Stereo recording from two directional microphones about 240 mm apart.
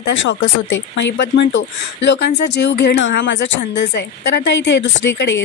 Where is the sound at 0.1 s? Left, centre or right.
Left.